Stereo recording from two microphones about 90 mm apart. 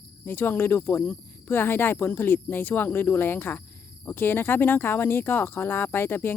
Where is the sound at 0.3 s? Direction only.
25° left (ahead or behind).